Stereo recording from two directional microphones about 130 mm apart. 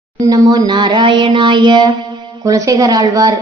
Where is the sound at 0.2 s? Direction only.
30° right (ahead or behind).